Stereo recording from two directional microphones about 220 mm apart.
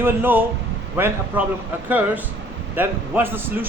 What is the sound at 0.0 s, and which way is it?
Speech, 10° right (ahead or behind).